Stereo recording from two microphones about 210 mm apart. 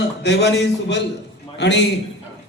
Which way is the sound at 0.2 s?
55° left (ahead or behind).